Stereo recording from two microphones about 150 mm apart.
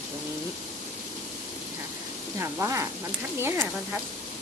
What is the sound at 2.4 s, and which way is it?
Speech, 20° right (ahead or behind).